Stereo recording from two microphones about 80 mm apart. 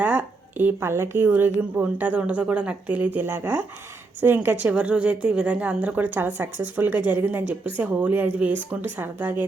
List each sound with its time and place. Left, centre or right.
0.0 s a woman's voice: right